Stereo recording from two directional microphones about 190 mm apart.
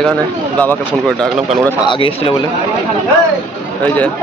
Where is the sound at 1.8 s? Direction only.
25° left (ahead or behind).